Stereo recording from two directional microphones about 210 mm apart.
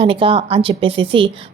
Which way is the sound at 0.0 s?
25° right (ahead or behind).